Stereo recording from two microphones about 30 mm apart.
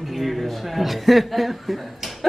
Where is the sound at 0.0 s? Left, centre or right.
Centre.